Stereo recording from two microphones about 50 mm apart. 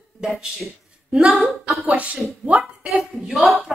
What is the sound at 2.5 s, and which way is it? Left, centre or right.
Speech, right.